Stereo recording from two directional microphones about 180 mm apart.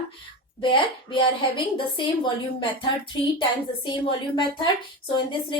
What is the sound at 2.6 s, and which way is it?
A woman's voice, 25° left (ahead or behind).